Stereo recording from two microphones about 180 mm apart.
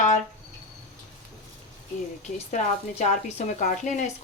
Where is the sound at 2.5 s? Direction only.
40° left (ahead or behind).